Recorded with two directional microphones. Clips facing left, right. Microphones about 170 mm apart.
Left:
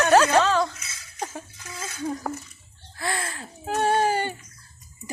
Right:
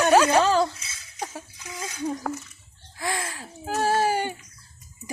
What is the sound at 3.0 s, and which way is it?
Speech, 10° right (ahead or behind).